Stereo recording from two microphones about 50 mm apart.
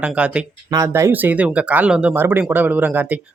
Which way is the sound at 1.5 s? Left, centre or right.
Right.